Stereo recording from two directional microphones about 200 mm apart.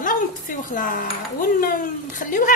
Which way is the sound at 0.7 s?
45° left (ahead or behind).